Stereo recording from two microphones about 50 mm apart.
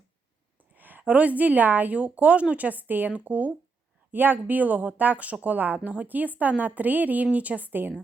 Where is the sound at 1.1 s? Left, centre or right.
Right.